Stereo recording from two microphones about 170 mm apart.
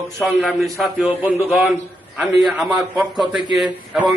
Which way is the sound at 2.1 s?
5° right (ahead or behind).